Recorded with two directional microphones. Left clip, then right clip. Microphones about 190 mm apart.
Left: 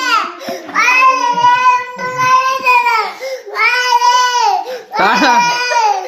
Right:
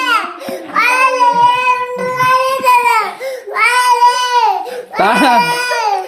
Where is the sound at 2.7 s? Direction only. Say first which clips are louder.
Right 2 dB; 35° right (ahead or behind).